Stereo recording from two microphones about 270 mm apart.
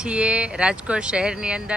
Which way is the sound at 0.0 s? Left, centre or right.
Centre.